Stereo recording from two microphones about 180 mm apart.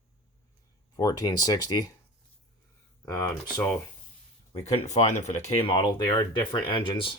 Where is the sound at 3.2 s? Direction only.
15° left (ahead or behind).